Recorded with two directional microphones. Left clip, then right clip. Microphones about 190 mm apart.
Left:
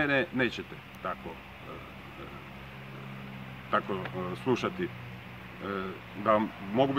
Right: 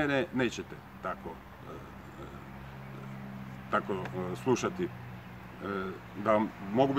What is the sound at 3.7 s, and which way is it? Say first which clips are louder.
Speech: left 2 dB; 5° right (ahead or behind).